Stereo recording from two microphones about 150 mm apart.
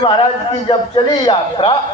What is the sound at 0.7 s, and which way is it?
A man's voice, 35° left (ahead or behind).